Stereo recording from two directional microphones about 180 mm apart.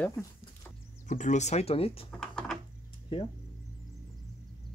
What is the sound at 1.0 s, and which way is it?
Speech, 45° left (ahead or behind).